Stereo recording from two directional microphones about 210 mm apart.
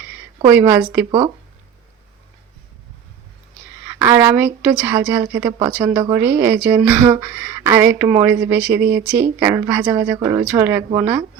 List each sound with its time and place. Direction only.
0.5 s speech: 10° right (ahead or behind)
3.9 s speech: 10° right (ahead or behind)
8.7 s speech: 50° right (ahead or behind)
9.4 s speech: 10° right (ahead or behind)